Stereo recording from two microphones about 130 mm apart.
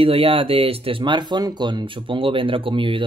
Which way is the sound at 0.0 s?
45° right (ahead or behind).